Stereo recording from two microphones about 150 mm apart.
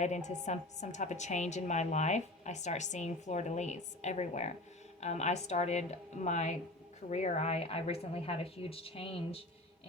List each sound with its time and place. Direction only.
0.0 s a woman's voice: 50° left (ahead or behind)